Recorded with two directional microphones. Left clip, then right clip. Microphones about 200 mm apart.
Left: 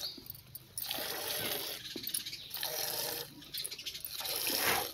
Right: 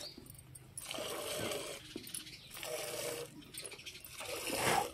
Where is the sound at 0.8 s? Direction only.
10° right (ahead or behind).